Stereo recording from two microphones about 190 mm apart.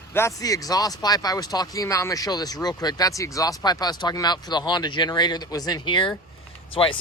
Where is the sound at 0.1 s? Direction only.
15° left (ahead or behind).